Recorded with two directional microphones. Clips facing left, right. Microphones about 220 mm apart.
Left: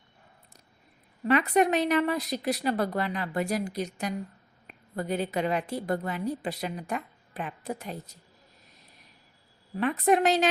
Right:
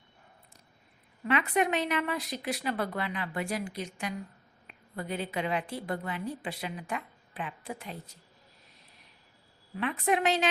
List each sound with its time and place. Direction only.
1.2 s a woman's voice: 40° left (ahead or behind)
9.7 s a woman's voice: 40° left (ahead or behind)